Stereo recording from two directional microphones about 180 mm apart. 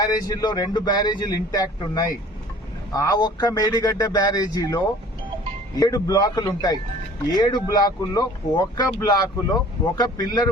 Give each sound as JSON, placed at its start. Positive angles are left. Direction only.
{"t": 0.0, "sound": "speech", "side_deg": 20}